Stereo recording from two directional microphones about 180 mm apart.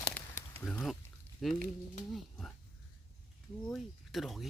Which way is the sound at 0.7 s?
5° left (ahead or behind).